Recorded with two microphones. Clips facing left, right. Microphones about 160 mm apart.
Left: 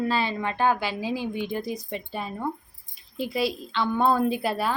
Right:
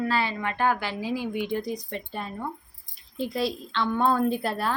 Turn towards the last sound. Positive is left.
turn(degrees=5)  # may be behind; listen again after turning